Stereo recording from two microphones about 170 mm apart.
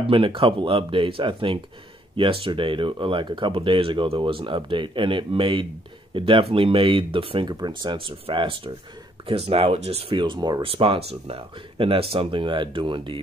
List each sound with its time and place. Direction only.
0.0 s speech: 30° right (ahead or behind)